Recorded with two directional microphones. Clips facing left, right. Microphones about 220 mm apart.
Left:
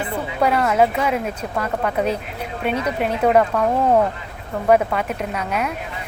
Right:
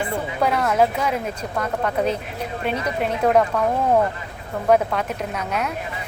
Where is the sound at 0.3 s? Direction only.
5° left (ahead or behind).